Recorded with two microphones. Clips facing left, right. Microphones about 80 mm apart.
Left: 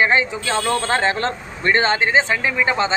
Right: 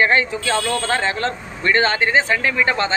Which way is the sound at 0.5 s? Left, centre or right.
Left.